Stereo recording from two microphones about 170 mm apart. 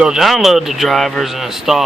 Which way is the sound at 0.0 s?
5° right (ahead or behind).